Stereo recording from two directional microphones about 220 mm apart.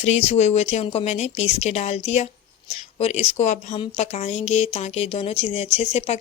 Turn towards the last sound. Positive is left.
turn(degrees=30)  # may be behind; listen again after turning